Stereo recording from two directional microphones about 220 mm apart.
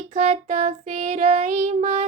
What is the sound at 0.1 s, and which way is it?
Child singing, 30° right (ahead or behind).